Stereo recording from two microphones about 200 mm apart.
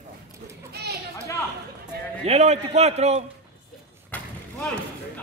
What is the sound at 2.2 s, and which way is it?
A man's voice, 35° right (ahead or behind).